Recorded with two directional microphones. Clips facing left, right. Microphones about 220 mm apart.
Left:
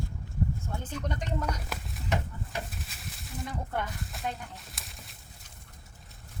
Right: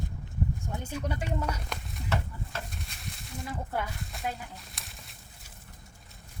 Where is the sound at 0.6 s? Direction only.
15° right (ahead or behind).